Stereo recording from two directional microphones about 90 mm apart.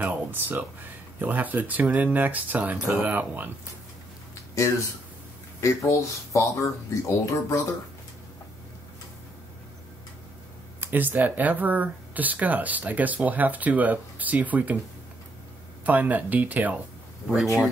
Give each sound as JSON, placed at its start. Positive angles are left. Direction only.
{"t": 0.0, "sound": "speech", "side_deg": -20}
{"t": 5.6, "sound": "speech", "side_deg": 35}
{"t": 10.8, "sound": "speech", "side_deg": -20}
{"t": 15.8, "sound": "speech", "side_deg": -20}